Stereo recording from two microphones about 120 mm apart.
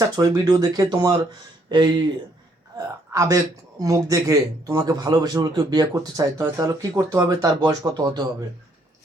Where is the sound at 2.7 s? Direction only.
25° right (ahead or behind).